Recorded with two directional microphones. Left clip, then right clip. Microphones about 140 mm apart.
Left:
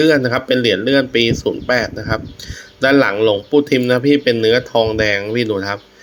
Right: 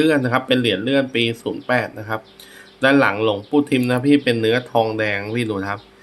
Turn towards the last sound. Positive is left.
turn(degrees=25)  # may be behind; listen again after turning